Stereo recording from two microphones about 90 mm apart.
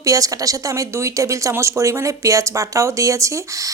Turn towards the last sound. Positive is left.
turn(degrees=-35)  # may be behind; listen again after turning